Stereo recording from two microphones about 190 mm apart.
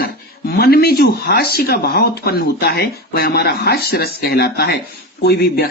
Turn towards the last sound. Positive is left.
turn(degrees=55)  # may be behind; listen again after turning